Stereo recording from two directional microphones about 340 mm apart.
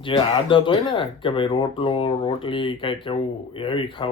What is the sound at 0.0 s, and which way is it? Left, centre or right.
Speech, centre.